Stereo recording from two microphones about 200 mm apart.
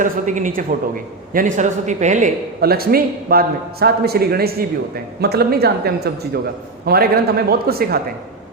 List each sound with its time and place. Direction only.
0.0 s a man's voice: 40° right (ahead or behind)